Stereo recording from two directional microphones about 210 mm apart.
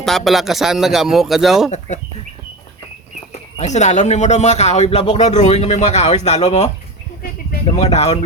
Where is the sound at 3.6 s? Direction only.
35° left (ahead or behind).